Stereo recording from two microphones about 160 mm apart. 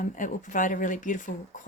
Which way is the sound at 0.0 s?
55° left (ahead or behind).